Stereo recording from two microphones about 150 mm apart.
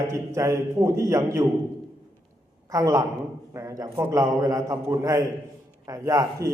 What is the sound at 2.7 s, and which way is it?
A man's voice, 20° right (ahead or behind).